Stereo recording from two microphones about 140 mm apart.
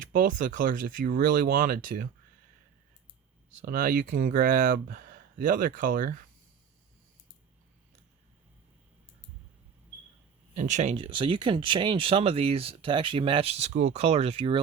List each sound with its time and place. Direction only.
0.0 s speech: 75° right (ahead or behind)
3.6 s speech: 85° right
10.5 s speech: 60° right (ahead or behind)
10.9 s speech: 35° right (ahead or behind)